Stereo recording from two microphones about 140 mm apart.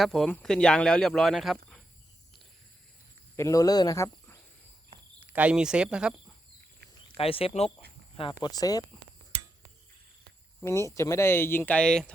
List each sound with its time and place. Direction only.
0.0 s speech: centre (ahead or behind)
3.3 s speech: 20° left (ahead or behind)
5.2 s speech: 10° right (ahead or behind)
7.2 s speech: 45° left (ahead or behind)
8.4 s speech: 25° left (ahead or behind)
10.6 s speech: 20° left (ahead or behind)